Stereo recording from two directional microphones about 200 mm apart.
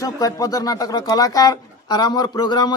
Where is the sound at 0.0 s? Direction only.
15° left (ahead or behind).